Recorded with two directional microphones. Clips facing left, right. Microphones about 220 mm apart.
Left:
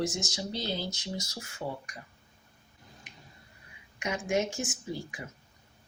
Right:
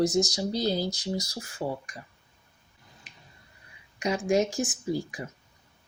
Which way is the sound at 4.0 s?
35° right (ahead or behind).